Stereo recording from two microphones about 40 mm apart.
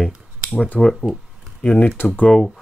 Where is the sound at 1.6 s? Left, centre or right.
Left.